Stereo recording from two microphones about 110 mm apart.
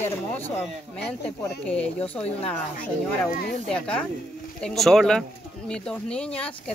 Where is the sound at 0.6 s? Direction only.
10° left (ahead or behind).